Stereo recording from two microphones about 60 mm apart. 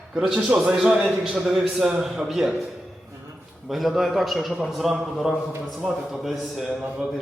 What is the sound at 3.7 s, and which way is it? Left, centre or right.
A man's voice, centre.